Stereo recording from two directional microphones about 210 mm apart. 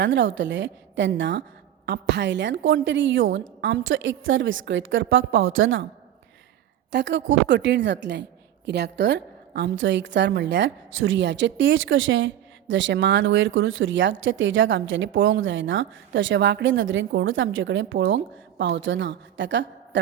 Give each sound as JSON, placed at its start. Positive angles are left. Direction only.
{"t": 0.0, "sound": "a woman's voice", "side_deg": -60}
{"t": 6.9, "sound": "a woman's voice", "side_deg": -55}